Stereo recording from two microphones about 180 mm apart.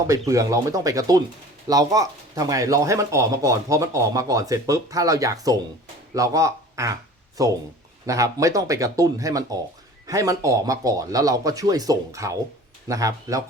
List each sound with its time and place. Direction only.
0.1 s speech: 15° right (ahead or behind)